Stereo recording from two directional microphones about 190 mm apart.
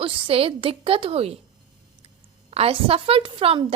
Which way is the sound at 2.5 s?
30° right (ahead or behind).